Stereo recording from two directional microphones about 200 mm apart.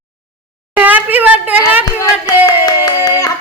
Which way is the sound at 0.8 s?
10° right (ahead or behind).